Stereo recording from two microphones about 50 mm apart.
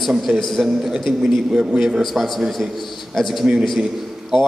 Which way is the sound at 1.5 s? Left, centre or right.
Centre.